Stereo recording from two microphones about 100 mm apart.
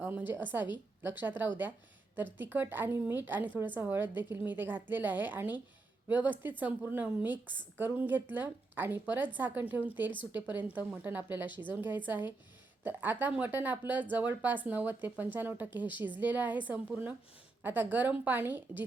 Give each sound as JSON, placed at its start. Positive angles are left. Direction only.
{"t": 0.0, "sound": "a woman's voice", "side_deg": -20}